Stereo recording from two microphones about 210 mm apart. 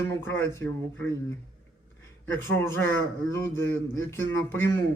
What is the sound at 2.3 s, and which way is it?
Speech, 10° left (ahead or behind).